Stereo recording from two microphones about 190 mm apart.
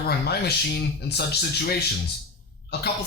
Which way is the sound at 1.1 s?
60° left (ahead or behind).